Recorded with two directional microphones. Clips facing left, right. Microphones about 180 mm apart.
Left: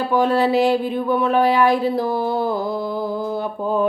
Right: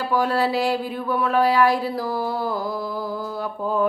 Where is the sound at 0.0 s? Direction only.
20° left (ahead or behind).